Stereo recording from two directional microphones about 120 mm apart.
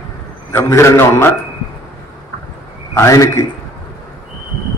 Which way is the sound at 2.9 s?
25° left (ahead or behind).